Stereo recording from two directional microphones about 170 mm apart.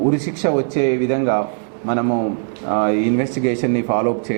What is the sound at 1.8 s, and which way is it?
Speech, 15° right (ahead or behind).